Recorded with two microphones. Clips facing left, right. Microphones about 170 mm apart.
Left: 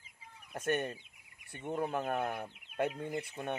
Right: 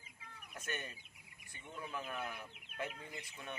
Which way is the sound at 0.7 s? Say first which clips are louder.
Left 13 dB; 60° left (ahead or behind).